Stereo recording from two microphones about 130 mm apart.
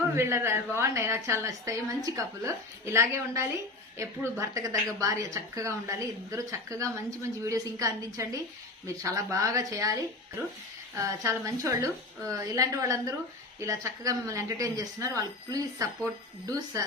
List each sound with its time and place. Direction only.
0.2 s a woman's voice: 20° right (ahead or behind)